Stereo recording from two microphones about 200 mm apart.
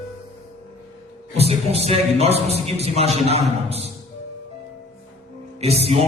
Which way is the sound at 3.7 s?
30° right (ahead or behind).